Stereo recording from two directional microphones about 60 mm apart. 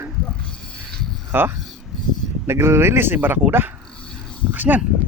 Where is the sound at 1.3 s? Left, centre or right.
Right.